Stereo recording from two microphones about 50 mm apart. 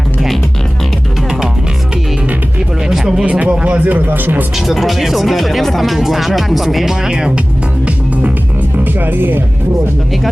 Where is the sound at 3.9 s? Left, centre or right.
Right.